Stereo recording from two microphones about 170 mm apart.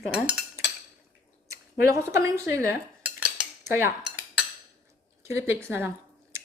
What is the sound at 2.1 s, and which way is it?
Cutlery, 15° right (ahead or behind).